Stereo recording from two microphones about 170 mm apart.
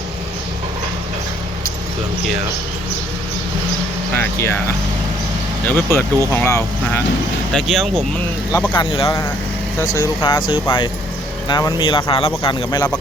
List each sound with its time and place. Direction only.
4.1 s speech: 15° left (ahead or behind)
5.6 s speech: 10° left (ahead or behind)
7.5 s speech: centre (ahead or behind)
8.7 s speech: 30° left (ahead or behind)
9.7 s speech: 15° left (ahead or behind)
10.5 s speech: 30° left (ahead or behind)